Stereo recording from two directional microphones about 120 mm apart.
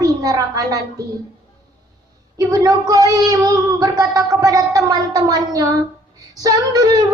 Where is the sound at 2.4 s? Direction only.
30° right (ahead or behind).